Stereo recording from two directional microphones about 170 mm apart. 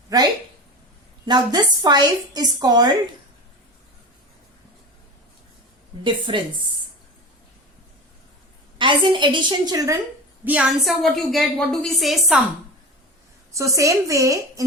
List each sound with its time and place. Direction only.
1.2 s a woman's voice: 25° right (ahead or behind)
6.0 s a woman's voice: 30° right (ahead or behind)
8.8 s a woman's voice: 30° right (ahead or behind)
10.4 s a woman's voice: 5° right (ahead or behind)
13.5 s a woman's voice: 20° right (ahead or behind)